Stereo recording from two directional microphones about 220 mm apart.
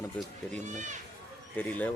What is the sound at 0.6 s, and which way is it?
Speech, 35° right (ahead or behind).